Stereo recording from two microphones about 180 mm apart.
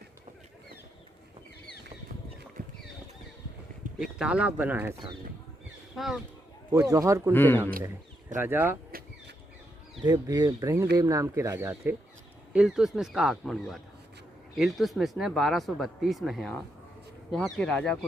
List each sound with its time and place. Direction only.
3.9 s speech: 5° right (ahead or behind)
6.0 s speech: centre (ahead or behind)
6.7 s speech: 15° right (ahead or behind)
7.3 s speech: 10° left (ahead or behind)
8.4 s speech: 10° right (ahead or behind)
8.9 s a sound: 55° right (ahead or behind)
10.0 s speech: 20° right (ahead or behind); by 17.9 s 5° left (ahead or behind)